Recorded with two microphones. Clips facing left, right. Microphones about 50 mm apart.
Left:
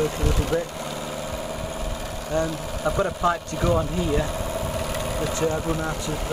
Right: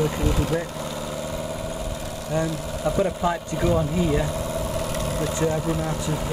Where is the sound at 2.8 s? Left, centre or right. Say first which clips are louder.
Right 1 dB; centre.